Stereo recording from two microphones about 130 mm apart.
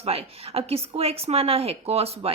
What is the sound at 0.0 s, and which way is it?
A woman's voice, 50° right (ahead or behind).